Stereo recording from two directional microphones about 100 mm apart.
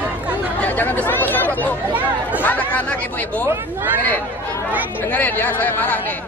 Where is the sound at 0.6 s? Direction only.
20° left (ahead or behind).